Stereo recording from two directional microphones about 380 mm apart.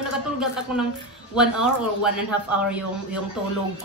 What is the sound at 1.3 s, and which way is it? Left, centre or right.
Speech, centre.